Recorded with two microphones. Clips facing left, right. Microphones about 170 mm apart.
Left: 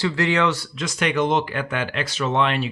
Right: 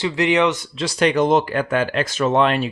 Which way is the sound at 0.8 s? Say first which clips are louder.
Right 5 dB; 35° right (ahead or behind).